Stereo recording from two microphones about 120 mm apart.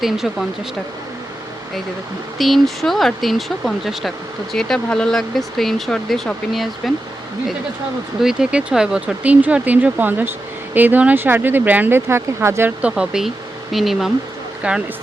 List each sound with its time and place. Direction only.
0.0 s speech: centre (ahead or behind)
2.4 s speech: centre (ahead or behind)
4.5 s speech: 5° left (ahead or behind)
8.2 s speech: 5° right (ahead or behind); by 12.7 s 20° right (ahead or behind)
12.8 s speech: 5° right (ahead or behind)